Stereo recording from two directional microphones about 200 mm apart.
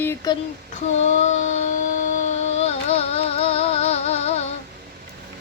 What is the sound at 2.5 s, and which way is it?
Music, 30° left (ahead or behind).